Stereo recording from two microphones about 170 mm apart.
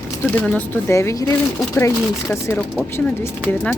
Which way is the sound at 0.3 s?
10° left (ahead or behind).